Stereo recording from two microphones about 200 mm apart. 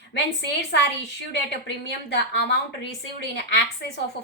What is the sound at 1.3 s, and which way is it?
Speech, 60° left (ahead or behind).